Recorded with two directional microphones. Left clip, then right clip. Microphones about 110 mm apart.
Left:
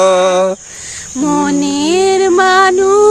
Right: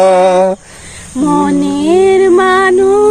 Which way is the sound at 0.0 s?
20° left (ahead or behind).